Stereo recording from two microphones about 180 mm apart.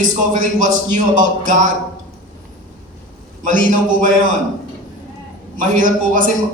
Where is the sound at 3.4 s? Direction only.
45° right (ahead or behind).